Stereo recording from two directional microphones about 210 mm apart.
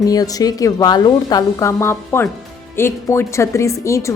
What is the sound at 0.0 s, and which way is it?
A woman's voice, 15° left (ahead or behind).